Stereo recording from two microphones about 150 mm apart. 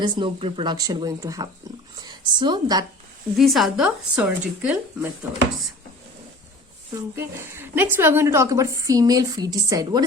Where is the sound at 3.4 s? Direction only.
Centre (ahead or behind).